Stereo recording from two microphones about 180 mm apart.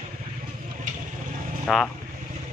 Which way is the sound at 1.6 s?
5° left (ahead or behind).